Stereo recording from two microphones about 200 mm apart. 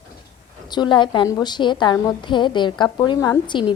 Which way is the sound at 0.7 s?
25° left (ahead or behind).